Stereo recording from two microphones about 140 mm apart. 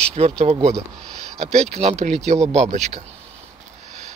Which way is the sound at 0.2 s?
50° right (ahead or behind).